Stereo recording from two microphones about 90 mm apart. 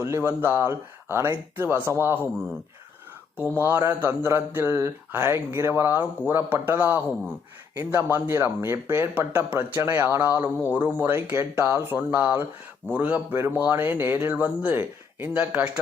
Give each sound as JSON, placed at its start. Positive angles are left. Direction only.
{"t": 0.0, "sound": "speech", "side_deg": -30}
{"t": 3.3, "sound": "speech", "side_deg": -25}